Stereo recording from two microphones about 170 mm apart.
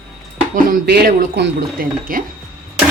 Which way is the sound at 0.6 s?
60° right (ahead or behind).